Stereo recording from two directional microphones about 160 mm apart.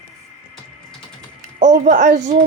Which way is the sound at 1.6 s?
50° right (ahead or behind).